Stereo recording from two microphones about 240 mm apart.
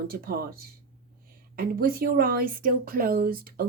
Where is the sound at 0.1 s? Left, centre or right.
Right.